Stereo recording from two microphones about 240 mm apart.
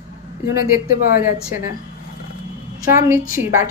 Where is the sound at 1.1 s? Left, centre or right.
Left.